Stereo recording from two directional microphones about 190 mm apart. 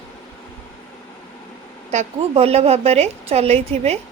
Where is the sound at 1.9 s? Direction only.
35° right (ahead or behind).